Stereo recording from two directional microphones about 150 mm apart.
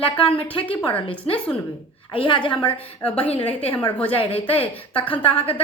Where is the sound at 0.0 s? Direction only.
35° left (ahead or behind).